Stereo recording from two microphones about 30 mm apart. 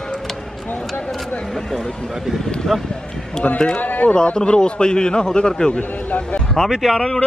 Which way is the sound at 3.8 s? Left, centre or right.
Left.